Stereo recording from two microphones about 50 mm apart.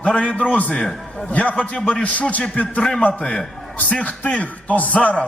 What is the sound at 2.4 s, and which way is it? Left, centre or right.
Speech, left.